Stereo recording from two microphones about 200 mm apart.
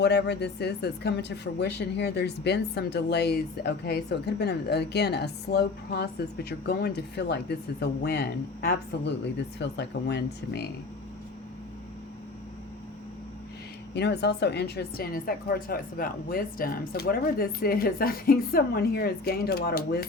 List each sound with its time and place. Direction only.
0.0 s speech: 55° left (ahead or behind)
13.9 s speech: 55° left (ahead or behind)